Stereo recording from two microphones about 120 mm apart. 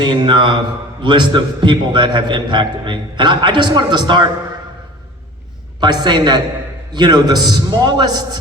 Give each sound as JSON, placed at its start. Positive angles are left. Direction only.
{"t": 0.0, "sound": "a man's voice", "side_deg": -40}
{"t": 5.8, "sound": "a man's voice", "side_deg": -35}